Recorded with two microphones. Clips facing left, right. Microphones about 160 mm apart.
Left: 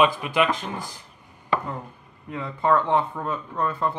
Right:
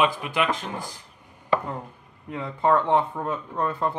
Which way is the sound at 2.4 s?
25° right (ahead or behind).